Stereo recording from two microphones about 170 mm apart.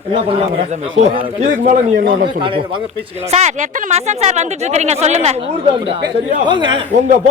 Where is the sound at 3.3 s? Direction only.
40° right (ahead or behind).